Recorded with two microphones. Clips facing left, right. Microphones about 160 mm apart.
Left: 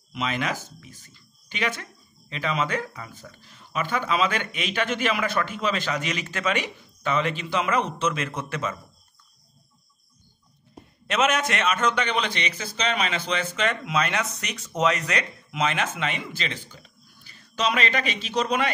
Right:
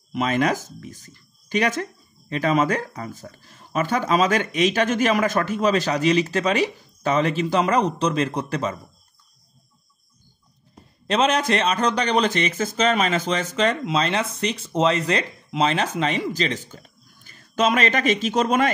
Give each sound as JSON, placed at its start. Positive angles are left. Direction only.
{"t": 0.1, "sound": "speech", "side_deg": -45}
{"t": 11.1, "sound": "speech", "side_deg": -30}